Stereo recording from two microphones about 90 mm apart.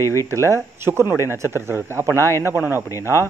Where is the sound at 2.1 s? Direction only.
30° left (ahead or behind).